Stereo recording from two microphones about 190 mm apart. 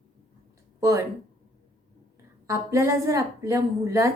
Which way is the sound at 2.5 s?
15° right (ahead or behind).